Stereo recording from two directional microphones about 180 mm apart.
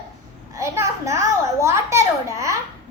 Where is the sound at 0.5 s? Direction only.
15° right (ahead or behind).